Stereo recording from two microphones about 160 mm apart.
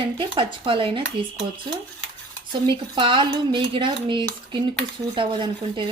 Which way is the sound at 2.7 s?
30° right (ahead or behind).